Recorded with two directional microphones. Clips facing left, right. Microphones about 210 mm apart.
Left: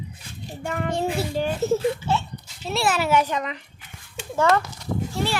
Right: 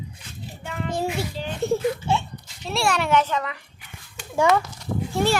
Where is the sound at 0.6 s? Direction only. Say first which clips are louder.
Left 4 dB; 50° left (ahead or behind).